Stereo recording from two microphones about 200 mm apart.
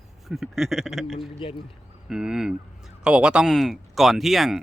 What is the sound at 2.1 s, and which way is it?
Speech, 5° right (ahead or behind).